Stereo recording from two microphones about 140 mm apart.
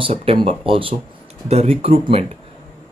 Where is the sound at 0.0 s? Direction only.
45° right (ahead or behind).